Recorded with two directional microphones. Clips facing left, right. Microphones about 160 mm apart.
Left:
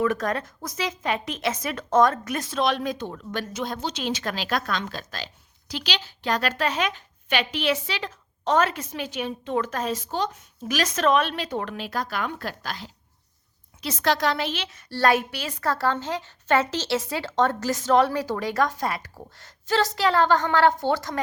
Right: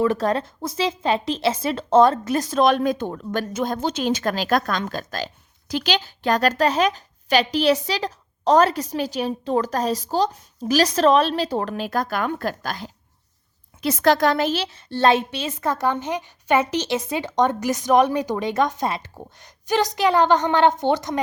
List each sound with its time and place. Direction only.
0.0 s a woman's voice: 30° right (ahead or behind)